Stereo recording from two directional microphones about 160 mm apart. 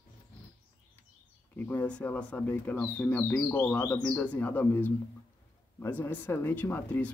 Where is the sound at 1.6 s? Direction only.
10° left (ahead or behind).